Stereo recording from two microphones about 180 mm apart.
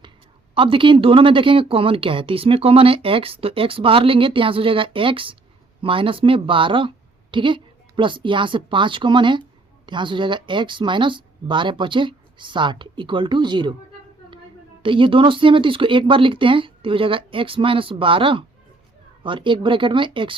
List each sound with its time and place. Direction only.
0.5 s speech: 30° right (ahead or behind)
14.8 s speech: 30° right (ahead or behind)